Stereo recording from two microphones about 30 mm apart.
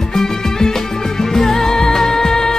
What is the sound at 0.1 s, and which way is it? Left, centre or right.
Music, centre.